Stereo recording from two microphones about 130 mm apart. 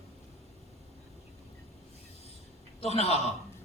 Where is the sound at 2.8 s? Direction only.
55° left (ahead or behind).